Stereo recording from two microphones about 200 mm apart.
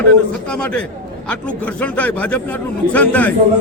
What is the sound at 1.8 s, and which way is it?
Speech, 5° left (ahead or behind).